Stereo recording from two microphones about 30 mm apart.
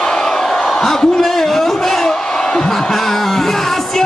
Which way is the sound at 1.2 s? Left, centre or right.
Centre.